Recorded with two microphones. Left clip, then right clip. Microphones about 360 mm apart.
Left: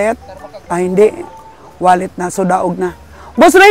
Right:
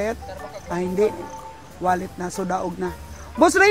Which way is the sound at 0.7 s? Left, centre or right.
Left.